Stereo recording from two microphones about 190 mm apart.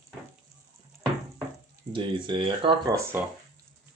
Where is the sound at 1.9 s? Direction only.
25° right (ahead or behind).